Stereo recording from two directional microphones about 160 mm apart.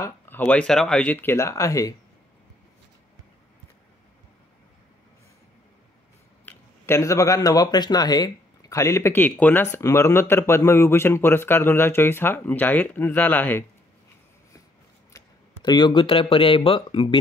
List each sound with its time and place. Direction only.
0.0 s speech: 15° left (ahead or behind)
6.4 s speech: 15° left (ahead or behind)
15.1 s speech: 25° left (ahead or behind)